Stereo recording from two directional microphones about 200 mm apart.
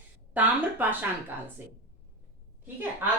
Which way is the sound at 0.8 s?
10° right (ahead or behind).